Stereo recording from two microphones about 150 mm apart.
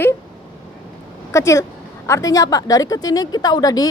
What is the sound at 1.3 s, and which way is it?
A woman's voice, 20° left (ahead or behind).